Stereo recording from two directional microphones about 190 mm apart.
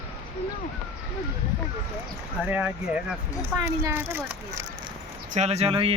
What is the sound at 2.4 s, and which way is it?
A child's voice, 10° right (ahead or behind).